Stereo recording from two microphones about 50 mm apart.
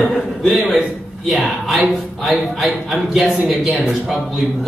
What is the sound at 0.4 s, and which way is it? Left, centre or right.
A man's voice, centre.